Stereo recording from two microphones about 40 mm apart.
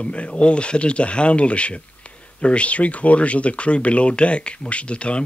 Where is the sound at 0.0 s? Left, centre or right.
Left.